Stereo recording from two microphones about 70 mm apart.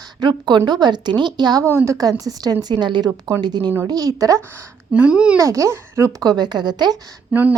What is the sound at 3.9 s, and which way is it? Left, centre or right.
Speech, right.